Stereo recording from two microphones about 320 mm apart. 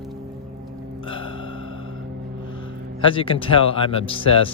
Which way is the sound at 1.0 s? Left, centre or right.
Centre.